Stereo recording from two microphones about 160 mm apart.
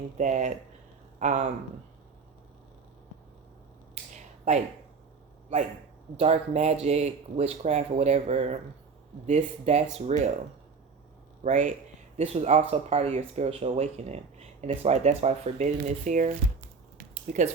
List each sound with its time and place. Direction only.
0.2 s speech: 50° right (ahead or behind)
4.1 s finger snapping: 50° right (ahead or behind)
6.1 s speech: 40° right (ahead or behind)
11.4 s speech: 50° right (ahead or behind)
12.1 s speech: 40° right (ahead or behind)